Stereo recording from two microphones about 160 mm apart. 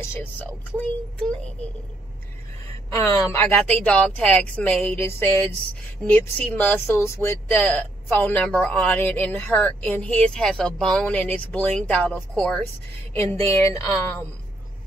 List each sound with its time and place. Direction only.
0.0 s speech: 15° left (ahead or behind)
3.0 s speech: 15° left (ahead or behind)